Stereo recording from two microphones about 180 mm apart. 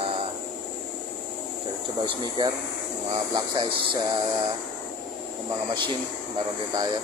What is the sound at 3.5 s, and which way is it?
Speech, 25° right (ahead or behind).